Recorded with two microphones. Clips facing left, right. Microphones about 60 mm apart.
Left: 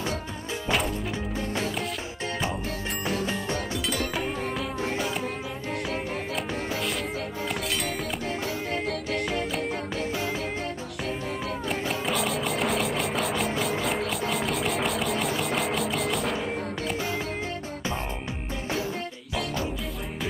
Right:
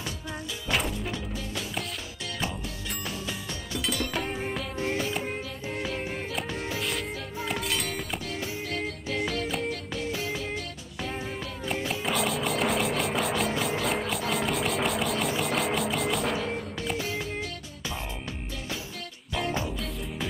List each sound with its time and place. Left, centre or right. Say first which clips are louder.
0.7 s music: left 2 dB; centre
3.7 s music: left 1 dB; centre
7.4 s music: right 1 dB; centre
9.4 s music: left 1 dB; centre
9.7 s music: left 2 dB; left
11.9 s music: even; centre